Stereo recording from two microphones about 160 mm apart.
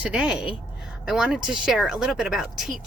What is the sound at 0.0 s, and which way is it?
Speech, 5° right (ahead or behind).